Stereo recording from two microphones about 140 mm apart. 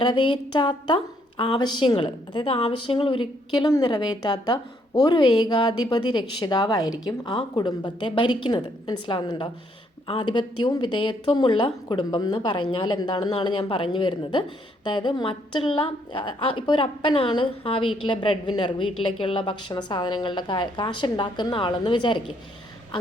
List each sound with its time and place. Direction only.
0.0 s a woman's voice: 35° left (ahead or behind)